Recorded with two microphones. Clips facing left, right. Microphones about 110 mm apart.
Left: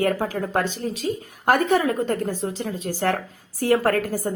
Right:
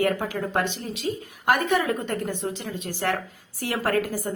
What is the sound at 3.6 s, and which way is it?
Speech, 45° left (ahead or behind).